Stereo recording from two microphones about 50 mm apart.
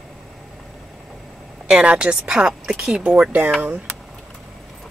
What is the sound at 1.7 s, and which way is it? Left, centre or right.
A woman's voice, right.